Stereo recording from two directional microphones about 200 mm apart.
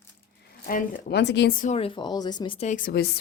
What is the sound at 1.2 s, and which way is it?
Speech, 60° left (ahead or behind).